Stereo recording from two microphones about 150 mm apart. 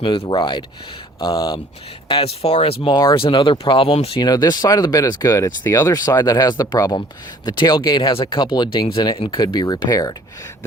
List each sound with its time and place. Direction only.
0.2 s speech: 30° left (ahead or behind)
4.2 s speech: 25° left (ahead or behind)